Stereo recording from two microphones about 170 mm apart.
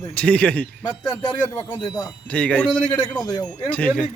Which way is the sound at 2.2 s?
5° left (ahead or behind).